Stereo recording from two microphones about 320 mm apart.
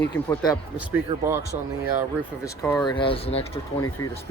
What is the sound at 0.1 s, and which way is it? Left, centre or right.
Speech, centre.